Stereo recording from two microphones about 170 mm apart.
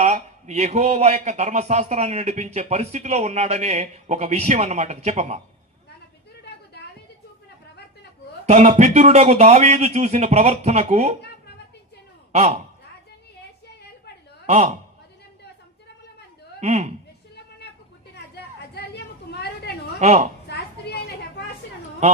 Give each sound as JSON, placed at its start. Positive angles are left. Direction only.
{"t": 0.0, "sound": "a man's voice", "side_deg": -40}
{"t": 8.4, "sound": "a man's voice", "side_deg": -40}
{"t": 12.3, "sound": "a man's voice", "side_deg": -40}
{"t": 14.4, "sound": "a man's voice", "side_deg": -40}
{"t": 16.6, "sound": "speech", "side_deg": -40}
{"t": 18.7, "sound": "a sound", "side_deg": 70}
{"t": 20.0, "sound": "a man's voice", "side_deg": -40}
{"t": 20.5, "sound": "a sound", "side_deg": 70}